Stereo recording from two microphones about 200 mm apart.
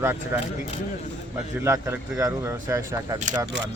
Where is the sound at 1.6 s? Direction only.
15° right (ahead or behind).